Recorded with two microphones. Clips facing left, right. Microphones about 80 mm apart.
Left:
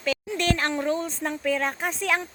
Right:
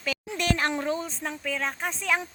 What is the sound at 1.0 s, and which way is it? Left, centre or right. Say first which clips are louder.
Speech: left 6 dB; centre.